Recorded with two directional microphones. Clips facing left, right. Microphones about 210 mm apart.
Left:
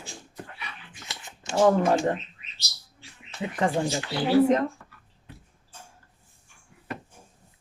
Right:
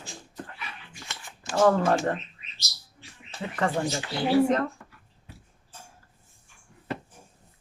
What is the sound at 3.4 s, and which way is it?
Speech, 15° left (ahead or behind).